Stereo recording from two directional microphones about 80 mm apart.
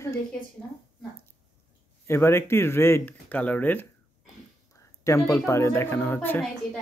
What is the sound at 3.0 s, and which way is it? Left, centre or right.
Speech, centre.